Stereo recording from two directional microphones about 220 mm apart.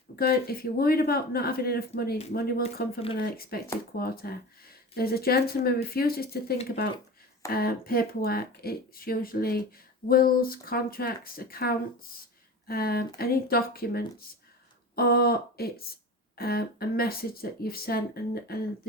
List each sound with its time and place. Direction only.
0.2 s speech: 45° left (ahead or behind)